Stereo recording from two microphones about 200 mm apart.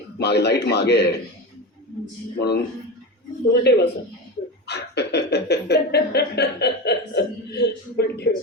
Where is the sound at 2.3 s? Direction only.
55° left (ahead or behind).